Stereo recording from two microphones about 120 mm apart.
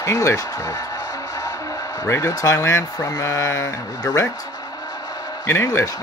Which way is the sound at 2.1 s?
25° left (ahead or behind).